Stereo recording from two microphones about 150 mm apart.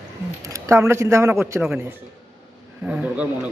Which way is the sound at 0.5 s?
20° right (ahead or behind).